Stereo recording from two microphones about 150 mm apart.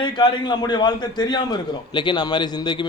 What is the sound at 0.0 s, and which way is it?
A man's voice, 30° left (ahead or behind).